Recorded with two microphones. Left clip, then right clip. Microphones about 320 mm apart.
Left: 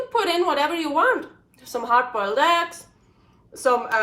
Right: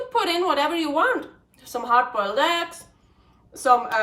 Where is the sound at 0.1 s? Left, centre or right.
Centre.